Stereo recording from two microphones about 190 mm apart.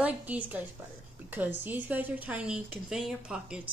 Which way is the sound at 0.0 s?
10° right (ahead or behind).